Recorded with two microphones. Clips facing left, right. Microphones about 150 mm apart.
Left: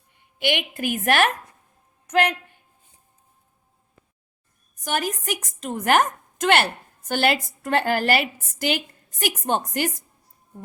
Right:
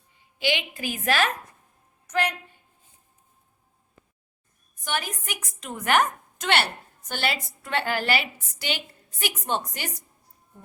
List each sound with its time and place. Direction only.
0.1 s a woman's voice: 60° left (ahead or behind)
4.8 s a woman's voice: 45° left (ahead or behind)